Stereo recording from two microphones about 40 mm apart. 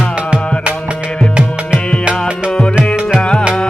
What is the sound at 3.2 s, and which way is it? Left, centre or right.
Music, left.